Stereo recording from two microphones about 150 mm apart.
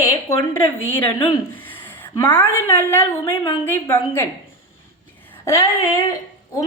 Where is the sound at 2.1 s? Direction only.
30° left (ahead or behind).